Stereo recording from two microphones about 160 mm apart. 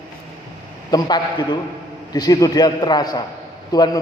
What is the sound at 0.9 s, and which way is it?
A man's voice, 25° left (ahead or behind).